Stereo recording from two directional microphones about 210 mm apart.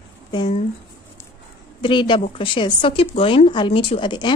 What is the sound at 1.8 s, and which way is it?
Speech, 20° left (ahead or behind).